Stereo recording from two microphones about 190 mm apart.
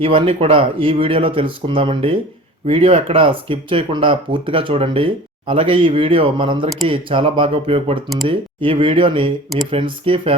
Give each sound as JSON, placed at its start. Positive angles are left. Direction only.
{"t": 0.0, "sound": "speech", "side_deg": -30}